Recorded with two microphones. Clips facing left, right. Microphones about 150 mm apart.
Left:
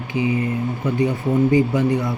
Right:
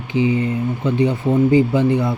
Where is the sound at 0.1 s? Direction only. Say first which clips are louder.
Right 3 dB; 30° right (ahead or behind).